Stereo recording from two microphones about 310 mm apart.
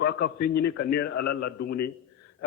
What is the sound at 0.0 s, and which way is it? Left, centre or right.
A man's voice, left.